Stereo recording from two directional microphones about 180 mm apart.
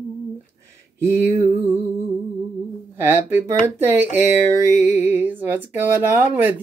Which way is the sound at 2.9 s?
10° right (ahead or behind).